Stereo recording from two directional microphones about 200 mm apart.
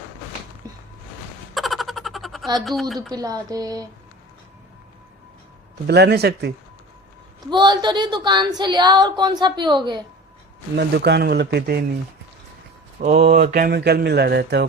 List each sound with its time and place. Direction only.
1.5 s a sound: centre (ahead or behind)
3.1 s speech: 20° right (ahead or behind)
5.9 s speech: 55° right (ahead or behind)
7.5 s a woman's voice: 20° right (ahead or behind)
10.8 s speech: 55° right (ahead or behind)
13.0 s mantra: 35° right (ahead or behind)
13.3 s speech: 45° right (ahead or behind)